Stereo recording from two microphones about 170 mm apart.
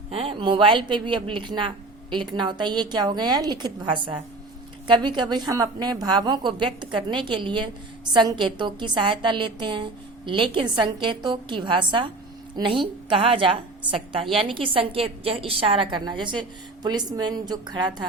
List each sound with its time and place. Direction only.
0.1 s a woman's voice: 35° right (ahead or behind)